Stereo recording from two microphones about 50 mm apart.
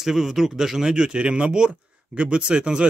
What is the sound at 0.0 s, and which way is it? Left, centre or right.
A man's voice, centre.